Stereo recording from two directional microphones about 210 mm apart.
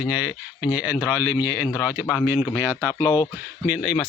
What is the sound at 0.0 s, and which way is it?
Speech, 5° right (ahead or behind).